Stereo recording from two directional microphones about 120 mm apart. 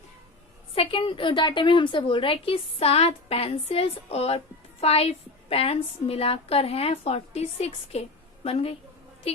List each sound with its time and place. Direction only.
0.8 s a woman's voice: 45° left (ahead or behind)